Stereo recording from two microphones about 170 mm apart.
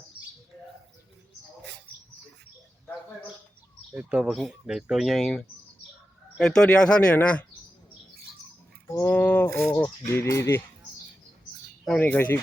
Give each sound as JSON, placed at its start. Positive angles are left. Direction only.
{"t": 3.9, "sound": "speech", "side_deg": -5}
{"t": 8.9, "sound": "speech", "side_deg": 15}
{"t": 11.9, "sound": "speech", "side_deg": 5}